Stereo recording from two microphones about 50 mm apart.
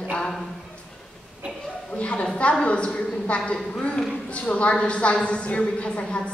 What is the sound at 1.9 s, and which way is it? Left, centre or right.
A woman's voice, left.